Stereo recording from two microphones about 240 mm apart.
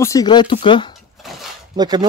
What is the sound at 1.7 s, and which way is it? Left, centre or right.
Speech, centre.